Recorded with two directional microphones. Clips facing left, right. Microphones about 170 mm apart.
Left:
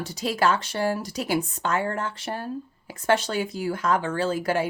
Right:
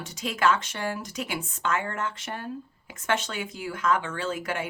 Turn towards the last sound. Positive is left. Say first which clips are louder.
# left 6 dB
turn(degrees=35)  # may be behind; listen again after turning